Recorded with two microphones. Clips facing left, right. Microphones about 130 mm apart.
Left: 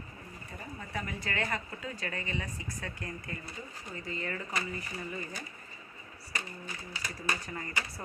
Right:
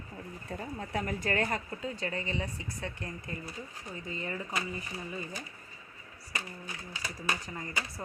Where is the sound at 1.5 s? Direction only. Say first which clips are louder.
Right 2 dB; 25° right (ahead or behind).